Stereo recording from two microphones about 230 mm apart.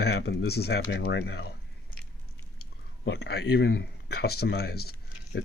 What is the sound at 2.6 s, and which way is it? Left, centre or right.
Speech, left.